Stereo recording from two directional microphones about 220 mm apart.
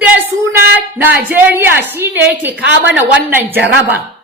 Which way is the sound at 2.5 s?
50° right (ahead or behind).